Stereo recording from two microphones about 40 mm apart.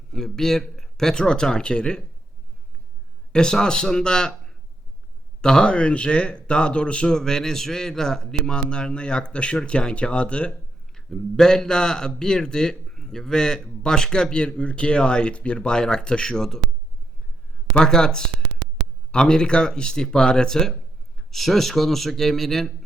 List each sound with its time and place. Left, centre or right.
0.1 s a man's voice: centre
3.3 s a man's voice: centre
7.1 s speech: centre
10.9 s a man's voice: centre
17.7 s a man's voice: centre
21.2 s speech: centre